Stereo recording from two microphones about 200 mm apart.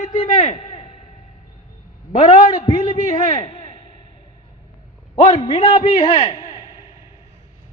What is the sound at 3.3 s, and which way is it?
Speech, 20° left (ahead or behind).